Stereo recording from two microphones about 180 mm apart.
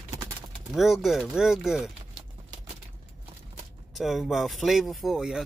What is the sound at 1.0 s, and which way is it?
Speech, centre (ahead or behind).